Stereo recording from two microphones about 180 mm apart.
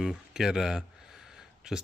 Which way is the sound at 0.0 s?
Centre (ahead or behind).